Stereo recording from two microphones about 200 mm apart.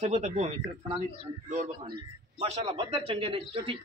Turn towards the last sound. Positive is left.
turn(degrees=-25)  # may be behind; listen again after turning